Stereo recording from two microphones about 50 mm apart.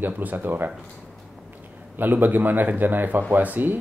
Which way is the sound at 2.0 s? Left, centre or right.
Right.